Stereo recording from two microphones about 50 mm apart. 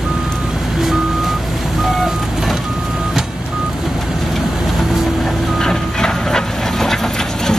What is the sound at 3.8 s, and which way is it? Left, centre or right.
Vehicle, centre.